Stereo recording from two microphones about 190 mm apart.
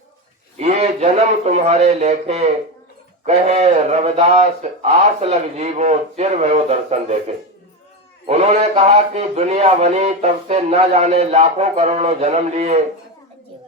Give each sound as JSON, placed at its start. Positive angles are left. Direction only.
{"t": 0.5, "sound": "a man's voice", "side_deg": -35}